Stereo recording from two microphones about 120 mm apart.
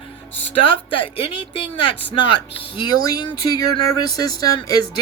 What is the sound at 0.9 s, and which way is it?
Speech, 50° left (ahead or behind).